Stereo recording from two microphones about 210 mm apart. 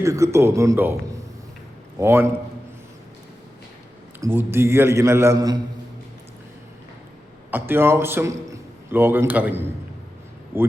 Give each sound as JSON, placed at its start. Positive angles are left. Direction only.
{"t": 0.0, "sound": "a man's voice", "side_deg": -15}
{"t": 4.2, "sound": "a man's voice", "side_deg": -10}
{"t": 7.5, "sound": "a man's voice", "side_deg": -10}